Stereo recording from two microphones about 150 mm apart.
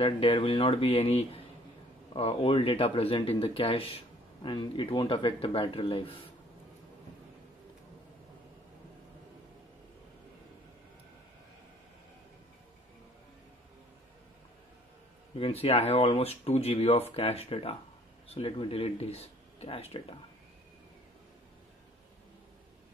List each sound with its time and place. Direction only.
0.0 s speech: 40° left (ahead or behind)
15.3 s speech: 40° left (ahead or behind)